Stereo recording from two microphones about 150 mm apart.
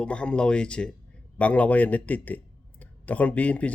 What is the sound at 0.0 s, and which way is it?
Speech, 5° left (ahead or behind).